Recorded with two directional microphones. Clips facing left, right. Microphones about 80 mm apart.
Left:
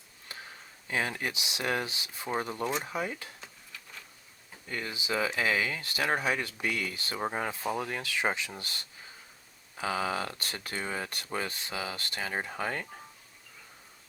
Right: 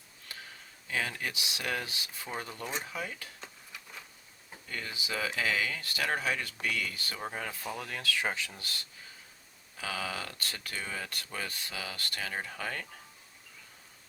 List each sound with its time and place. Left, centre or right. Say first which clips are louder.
0.3 s a sound: left 2 dB; left
0.9 s speech: left 3 dB; left
4.7 s speech: left 4 dB; left
9.7 s speech: left 6 dB; left